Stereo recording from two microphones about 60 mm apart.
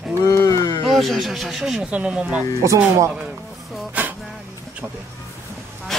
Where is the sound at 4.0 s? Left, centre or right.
Right.